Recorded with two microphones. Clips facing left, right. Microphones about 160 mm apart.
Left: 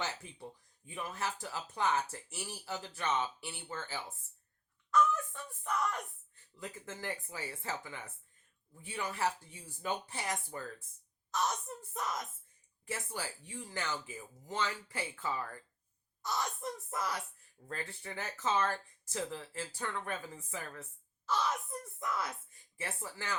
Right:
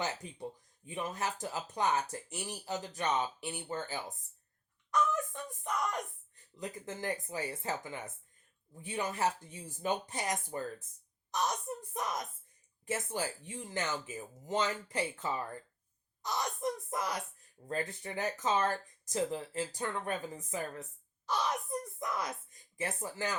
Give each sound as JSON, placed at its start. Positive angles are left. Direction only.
{"t": 0.0, "sound": "speech", "side_deg": -20}
{"t": 5.6, "sound": "speech", "side_deg": -15}